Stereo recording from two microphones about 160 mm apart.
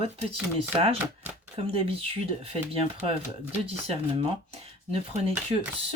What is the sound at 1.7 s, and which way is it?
Speech, 35° right (ahead or behind).